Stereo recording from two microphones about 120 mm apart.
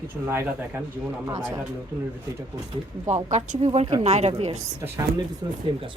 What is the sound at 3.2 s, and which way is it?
A woman's voice, 70° right (ahead or behind).